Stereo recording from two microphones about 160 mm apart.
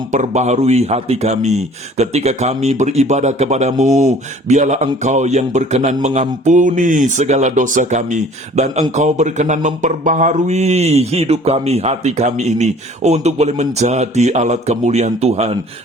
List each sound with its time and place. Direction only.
0.1 s speech: 45° right (ahead or behind)